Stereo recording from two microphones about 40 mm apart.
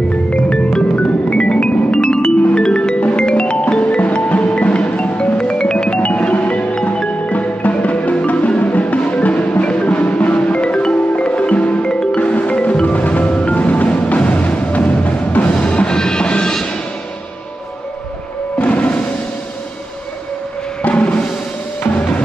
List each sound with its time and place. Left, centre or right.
0.9 s music: left
5.9 s music: left
18.6 s music: left
20.8 s music: left